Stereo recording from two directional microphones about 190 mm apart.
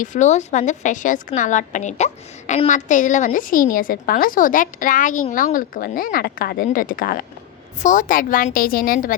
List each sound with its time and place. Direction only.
0.0 s a woman's voice: 40° left (ahead or behind)